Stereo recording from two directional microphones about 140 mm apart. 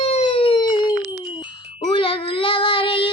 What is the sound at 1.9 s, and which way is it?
Child singing, 40° left (ahead or behind).